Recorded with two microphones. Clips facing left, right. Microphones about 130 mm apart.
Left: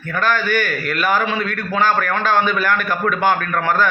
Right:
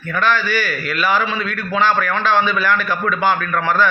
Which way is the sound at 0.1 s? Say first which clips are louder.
Even; 45° left (ahead or behind).